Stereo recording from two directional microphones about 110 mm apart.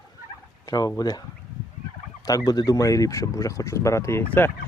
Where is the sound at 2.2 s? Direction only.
35° left (ahead or behind).